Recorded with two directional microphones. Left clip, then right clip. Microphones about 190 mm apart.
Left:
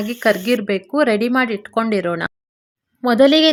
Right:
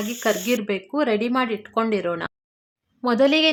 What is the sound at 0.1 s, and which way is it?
A woman's voice, 20° left (ahead or behind).